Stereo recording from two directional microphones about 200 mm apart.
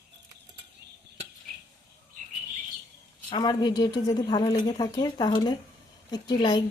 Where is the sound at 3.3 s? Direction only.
20° left (ahead or behind).